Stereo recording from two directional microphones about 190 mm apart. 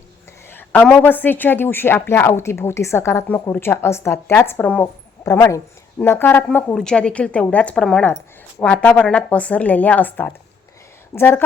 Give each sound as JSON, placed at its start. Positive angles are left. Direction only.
{"t": 0.5, "sound": "a woman's voice", "side_deg": 10}